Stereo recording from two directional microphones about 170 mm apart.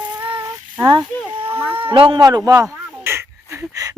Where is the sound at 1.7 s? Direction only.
30° right (ahead or behind).